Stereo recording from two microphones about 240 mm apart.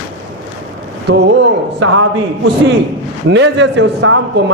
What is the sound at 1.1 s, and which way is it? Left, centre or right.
Speech, right.